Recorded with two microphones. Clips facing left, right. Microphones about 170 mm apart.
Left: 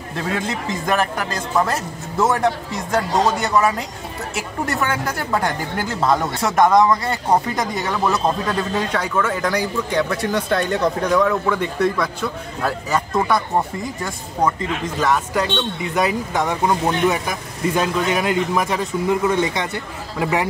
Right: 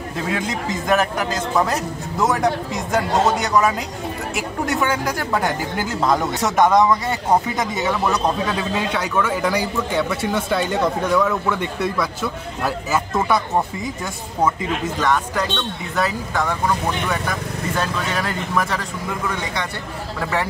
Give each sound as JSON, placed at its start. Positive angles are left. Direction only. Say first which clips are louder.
{"t": 0.5, "sound": "speech", "louder": "right 1 dB", "side_deg": 0}
{"t": 15.0, "sound": "a man's voice", "louder": "left 3 dB", "side_deg": 10}